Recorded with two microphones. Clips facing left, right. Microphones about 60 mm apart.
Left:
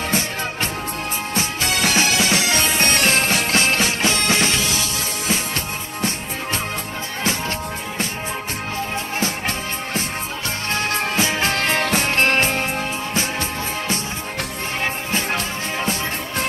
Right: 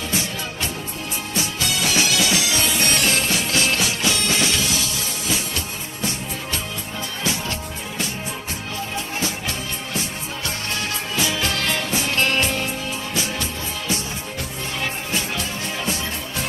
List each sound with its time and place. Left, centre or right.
1.4 s music: left
10.8 s music: left
15.1 s music: left